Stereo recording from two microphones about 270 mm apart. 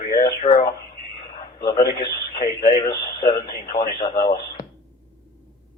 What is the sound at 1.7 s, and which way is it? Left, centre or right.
A man's voice, left.